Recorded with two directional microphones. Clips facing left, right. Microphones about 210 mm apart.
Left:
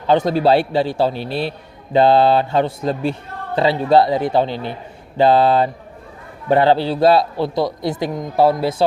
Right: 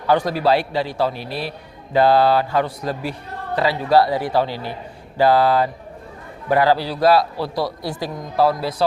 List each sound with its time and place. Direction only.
0.1 s a man's voice: 25° left (ahead or behind)